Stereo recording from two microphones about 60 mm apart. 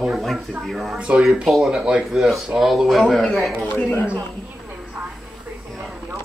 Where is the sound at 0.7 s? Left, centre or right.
Centre.